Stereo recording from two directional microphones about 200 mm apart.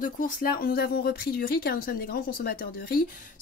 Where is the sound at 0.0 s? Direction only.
45° left (ahead or behind).